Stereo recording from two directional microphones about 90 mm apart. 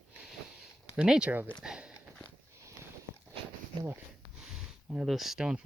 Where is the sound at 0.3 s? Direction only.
5° right (ahead or behind).